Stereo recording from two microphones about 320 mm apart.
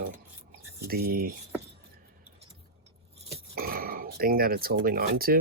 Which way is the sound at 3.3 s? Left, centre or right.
Right.